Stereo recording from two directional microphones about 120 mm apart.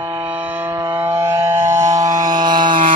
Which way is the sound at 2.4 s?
40° right (ahead or behind).